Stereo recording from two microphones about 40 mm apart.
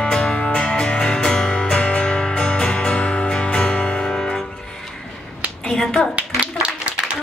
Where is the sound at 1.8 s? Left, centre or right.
Left.